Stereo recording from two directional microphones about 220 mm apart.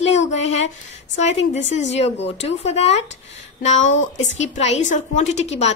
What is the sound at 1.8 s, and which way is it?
Speech, 30° left (ahead or behind).